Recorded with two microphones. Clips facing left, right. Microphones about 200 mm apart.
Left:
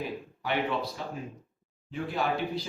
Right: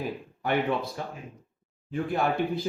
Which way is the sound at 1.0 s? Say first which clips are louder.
Even; 50° right (ahead or behind).